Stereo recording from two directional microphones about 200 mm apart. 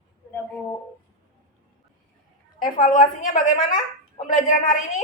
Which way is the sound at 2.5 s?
45° left (ahead or behind).